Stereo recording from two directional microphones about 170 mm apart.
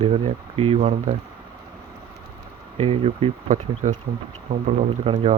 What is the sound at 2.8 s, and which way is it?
Speech, 35° right (ahead or behind).